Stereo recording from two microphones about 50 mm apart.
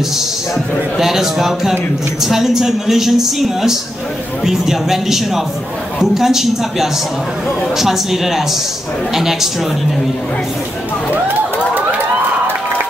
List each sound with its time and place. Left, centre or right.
0.9 s a man's voice: centre
11.1 s crowd: right